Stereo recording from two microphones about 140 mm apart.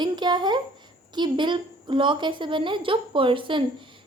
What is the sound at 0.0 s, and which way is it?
A woman's voice, 30° right (ahead or behind).